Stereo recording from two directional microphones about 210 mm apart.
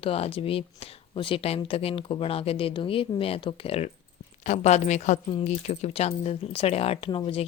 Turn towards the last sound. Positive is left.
turn(degrees=25)  # may be behind; listen again after turning